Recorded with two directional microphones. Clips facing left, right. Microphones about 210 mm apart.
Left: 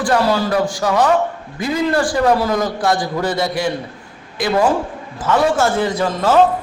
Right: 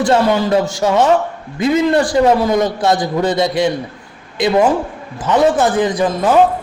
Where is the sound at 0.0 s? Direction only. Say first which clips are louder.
Right 3 dB; 25° right (ahead or behind).